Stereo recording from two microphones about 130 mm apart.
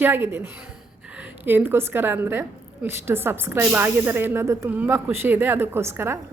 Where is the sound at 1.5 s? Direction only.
15° right (ahead or behind).